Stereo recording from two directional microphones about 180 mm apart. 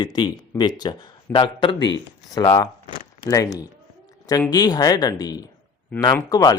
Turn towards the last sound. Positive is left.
turn(degrees=20)  # may be behind; listen again after turning